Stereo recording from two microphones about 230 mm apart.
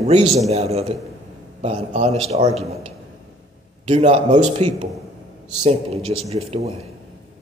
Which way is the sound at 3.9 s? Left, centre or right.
Right.